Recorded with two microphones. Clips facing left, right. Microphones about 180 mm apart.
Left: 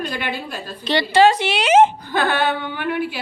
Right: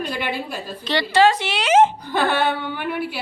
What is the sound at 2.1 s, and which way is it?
A woman's voice, centre (ahead or behind).